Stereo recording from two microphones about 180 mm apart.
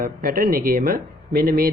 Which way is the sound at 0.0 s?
50° right (ahead or behind).